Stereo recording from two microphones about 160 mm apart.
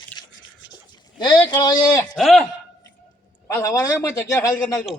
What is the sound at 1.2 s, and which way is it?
Speech, 30° left (ahead or behind).